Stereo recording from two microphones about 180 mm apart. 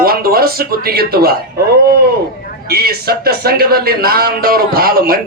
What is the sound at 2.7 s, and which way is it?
A man's voice, 60° right (ahead or behind).